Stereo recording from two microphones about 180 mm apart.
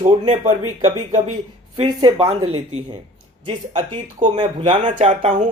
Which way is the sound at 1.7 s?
25° right (ahead or behind).